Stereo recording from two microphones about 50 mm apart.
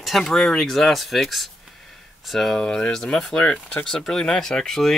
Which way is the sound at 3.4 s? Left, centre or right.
Centre.